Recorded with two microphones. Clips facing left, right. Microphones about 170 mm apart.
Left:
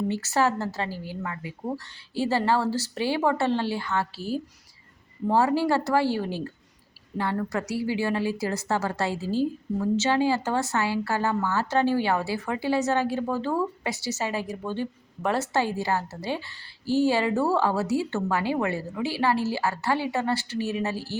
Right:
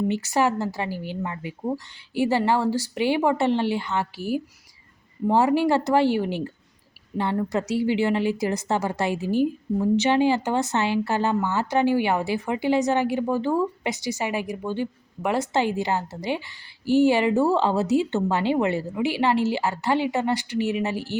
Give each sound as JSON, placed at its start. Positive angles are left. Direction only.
{"t": 0.1, "sound": "a woman's voice", "side_deg": -15}